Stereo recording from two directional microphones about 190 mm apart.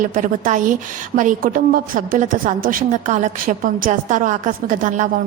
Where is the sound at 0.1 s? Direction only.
45° right (ahead or behind).